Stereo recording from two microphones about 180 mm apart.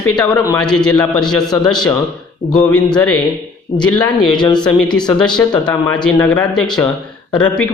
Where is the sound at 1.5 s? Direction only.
25° left (ahead or behind).